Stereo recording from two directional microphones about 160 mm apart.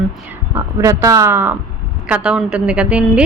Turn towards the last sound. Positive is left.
turn(degrees=-5)  # may be behind; listen again after turning